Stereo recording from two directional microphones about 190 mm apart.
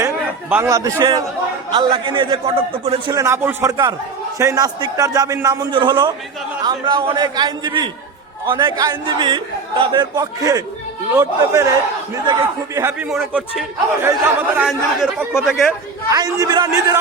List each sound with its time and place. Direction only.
0.5 s a man's voice: 15° right (ahead or behind)
3.2 s a man's voice: 15° right (ahead or behind)
11.1 s a man's voice: 10° right (ahead or behind)
12.1 s a man's voice: 25° right (ahead or behind)
12.8 s a man's voice: 10° right (ahead or behind)
16.0 s a man's voice: 20° right (ahead or behind)